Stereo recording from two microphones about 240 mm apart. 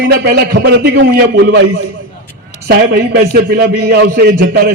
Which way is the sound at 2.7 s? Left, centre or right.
Right.